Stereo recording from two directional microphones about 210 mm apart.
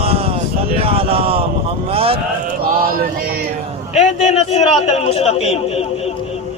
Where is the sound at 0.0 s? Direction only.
30° right (ahead or behind).